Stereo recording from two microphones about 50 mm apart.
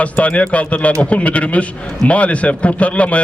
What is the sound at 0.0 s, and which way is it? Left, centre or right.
A man's voice, left.